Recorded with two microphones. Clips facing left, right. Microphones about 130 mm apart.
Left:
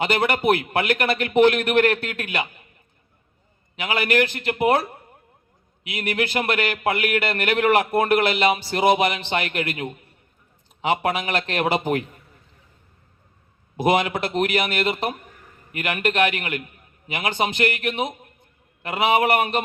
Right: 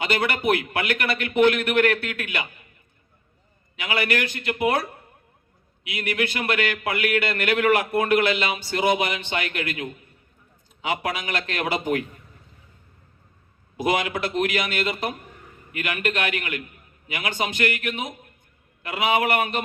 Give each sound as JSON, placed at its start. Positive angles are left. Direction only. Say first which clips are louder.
{"t": 0.0, "sound": "speech", "louder": "left 3 dB", "side_deg": 35}
{"t": 3.8, "sound": "speech", "louder": "left 4 dB", "side_deg": 40}
{"t": 5.9, "sound": "speech", "louder": "left 2 dB", "side_deg": 40}
{"t": 13.8, "sound": "speech", "louder": "left 3 dB", "side_deg": 35}